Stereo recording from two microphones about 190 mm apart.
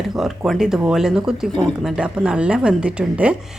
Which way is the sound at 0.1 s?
Centre (ahead or behind).